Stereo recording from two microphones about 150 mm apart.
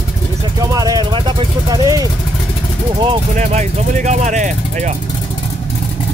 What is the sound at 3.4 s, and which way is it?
Speech, 50° right (ahead or behind).